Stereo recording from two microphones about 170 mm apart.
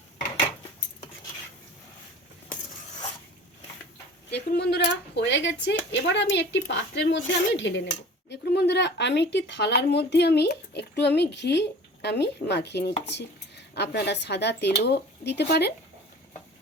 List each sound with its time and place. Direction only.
4.5 s speech: 75° left (ahead or behind)